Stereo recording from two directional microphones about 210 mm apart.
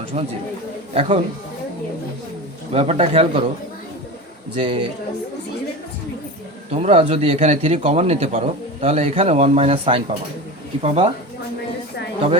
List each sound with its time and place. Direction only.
0.1 s a man's voice: 30° right (ahead or behind)
2.7 s a man's voice: 30° right (ahead or behind)
4.5 s a man's voice: 25° right (ahead or behind)
6.7 s a man's voice: 30° right (ahead or behind)